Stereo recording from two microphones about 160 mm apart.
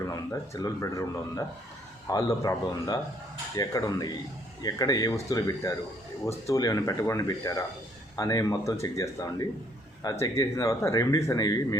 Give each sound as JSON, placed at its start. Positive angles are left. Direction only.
{"t": 0.1, "sound": "speech", "side_deg": 20}